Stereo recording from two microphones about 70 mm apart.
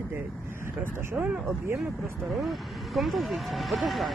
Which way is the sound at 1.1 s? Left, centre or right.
Centre.